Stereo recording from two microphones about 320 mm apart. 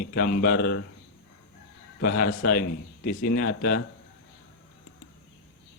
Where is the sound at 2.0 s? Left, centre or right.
Left.